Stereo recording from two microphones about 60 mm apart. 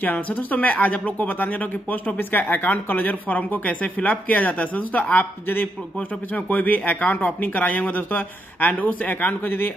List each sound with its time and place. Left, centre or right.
0.0 s speech: left